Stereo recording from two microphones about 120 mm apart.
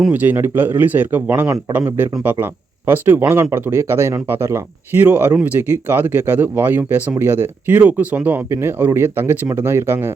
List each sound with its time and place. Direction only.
0.1 s speech: 15° right (ahead or behind)